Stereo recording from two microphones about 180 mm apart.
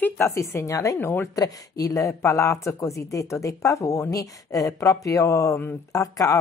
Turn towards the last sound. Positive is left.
turn(degrees=20)  # may be behind; listen again after turning